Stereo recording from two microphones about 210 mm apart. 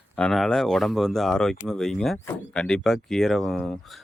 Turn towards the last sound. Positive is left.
turn(degrees=0)  # may be behind; listen again after turning